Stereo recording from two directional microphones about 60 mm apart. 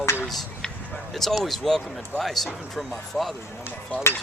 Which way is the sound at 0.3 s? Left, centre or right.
Centre.